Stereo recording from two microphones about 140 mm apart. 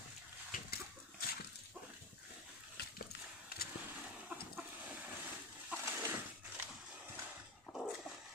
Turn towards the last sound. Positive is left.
turn(degrees=0)  # may be behind; listen again after turning